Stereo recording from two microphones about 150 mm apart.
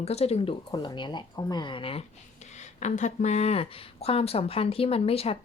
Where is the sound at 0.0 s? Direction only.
45° left (ahead or behind).